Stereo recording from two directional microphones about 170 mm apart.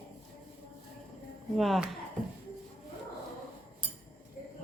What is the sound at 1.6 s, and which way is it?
Speech, centre (ahead or behind).